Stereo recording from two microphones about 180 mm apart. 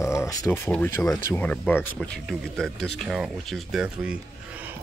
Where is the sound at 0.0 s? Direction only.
15° left (ahead or behind).